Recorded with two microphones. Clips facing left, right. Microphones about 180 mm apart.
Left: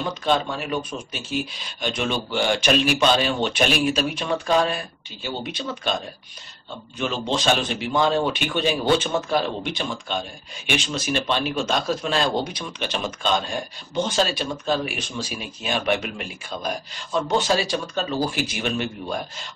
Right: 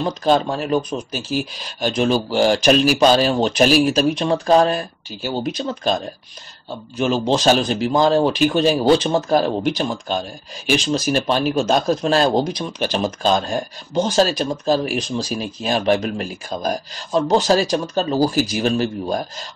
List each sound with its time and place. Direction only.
0.0 s speech: 35° right (ahead or behind)
7.0 s speech: 40° right (ahead or behind)